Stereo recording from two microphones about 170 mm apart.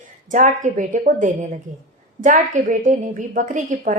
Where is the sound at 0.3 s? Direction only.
45° right (ahead or behind).